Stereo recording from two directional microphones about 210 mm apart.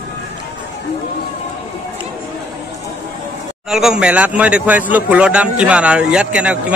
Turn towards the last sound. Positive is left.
turn(degrees=-5)  # may be behind; listen again after turning